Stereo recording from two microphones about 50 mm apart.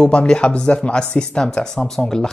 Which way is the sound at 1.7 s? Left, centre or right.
Centre.